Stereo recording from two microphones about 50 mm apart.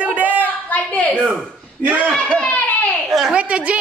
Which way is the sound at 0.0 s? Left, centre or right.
Right.